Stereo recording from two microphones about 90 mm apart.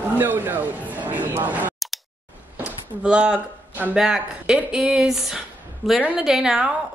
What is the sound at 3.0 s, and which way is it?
A woman's voice, 10° right (ahead or behind).